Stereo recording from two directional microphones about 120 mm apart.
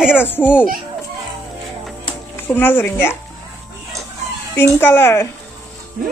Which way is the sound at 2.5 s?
15° left (ahead or behind).